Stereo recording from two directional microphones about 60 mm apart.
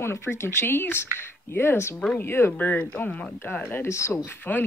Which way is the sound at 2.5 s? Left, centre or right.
Left.